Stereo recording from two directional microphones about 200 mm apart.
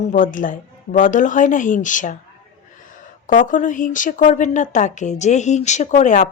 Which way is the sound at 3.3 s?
40° left (ahead or behind).